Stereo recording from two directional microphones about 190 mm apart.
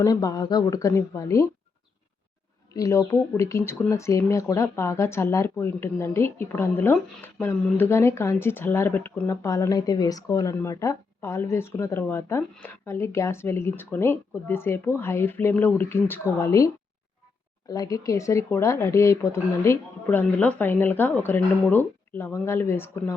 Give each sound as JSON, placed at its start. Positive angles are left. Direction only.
{"t": 0.0, "sound": "speech", "side_deg": 20}
{"t": 2.7, "sound": "speech", "side_deg": 15}